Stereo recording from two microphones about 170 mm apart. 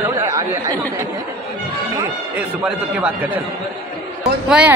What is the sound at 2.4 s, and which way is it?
Speech, 5° right (ahead or behind).